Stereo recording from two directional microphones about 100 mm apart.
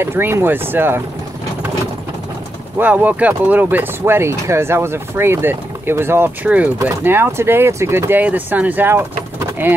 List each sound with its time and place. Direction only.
0.0 s speech: 25° right (ahead or behind)
2.8 s speech: 15° right (ahead or behind)